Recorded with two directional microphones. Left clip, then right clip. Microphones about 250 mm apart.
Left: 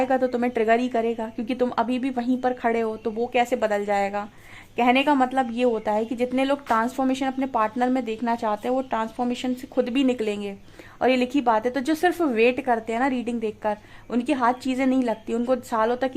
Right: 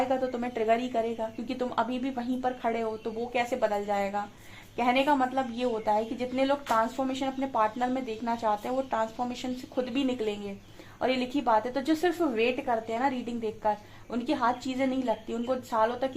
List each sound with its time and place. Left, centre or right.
0.1 s a woman's voice: left